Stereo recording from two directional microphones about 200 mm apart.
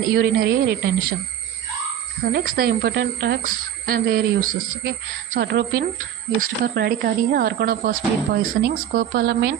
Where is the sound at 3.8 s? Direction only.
45° right (ahead or behind).